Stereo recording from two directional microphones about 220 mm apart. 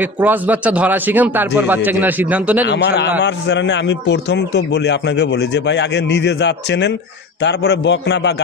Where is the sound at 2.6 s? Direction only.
50° left (ahead or behind).